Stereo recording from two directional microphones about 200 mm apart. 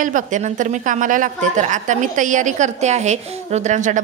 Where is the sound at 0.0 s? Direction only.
40° right (ahead or behind).